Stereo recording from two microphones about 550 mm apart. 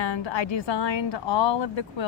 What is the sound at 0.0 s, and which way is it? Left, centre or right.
A woman's voice, left.